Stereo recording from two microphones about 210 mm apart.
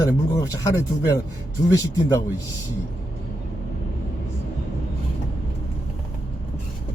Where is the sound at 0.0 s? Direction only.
15° left (ahead or behind).